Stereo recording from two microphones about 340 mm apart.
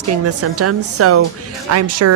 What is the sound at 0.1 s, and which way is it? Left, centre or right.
Speech, right.